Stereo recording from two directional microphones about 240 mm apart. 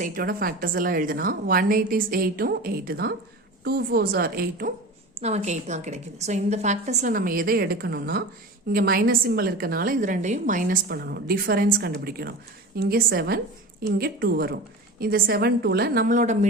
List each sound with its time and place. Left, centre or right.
0.0 s a woman's voice: right
5.2 s a woman's voice: right